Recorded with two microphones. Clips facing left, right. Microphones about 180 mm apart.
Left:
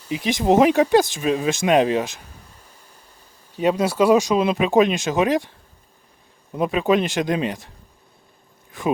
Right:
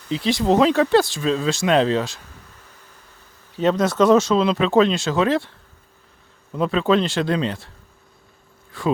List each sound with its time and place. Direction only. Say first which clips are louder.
0.0 s speech: right 1 dB; 15° left (ahead or behind)
8.7 s speech: right 1 dB; 20° left (ahead or behind)